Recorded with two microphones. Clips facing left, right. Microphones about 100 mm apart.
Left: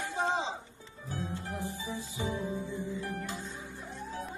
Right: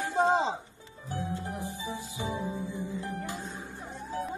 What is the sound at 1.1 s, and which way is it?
Music, 20° right (ahead or behind).